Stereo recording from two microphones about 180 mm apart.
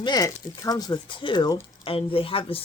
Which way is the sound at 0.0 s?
20° left (ahead or behind).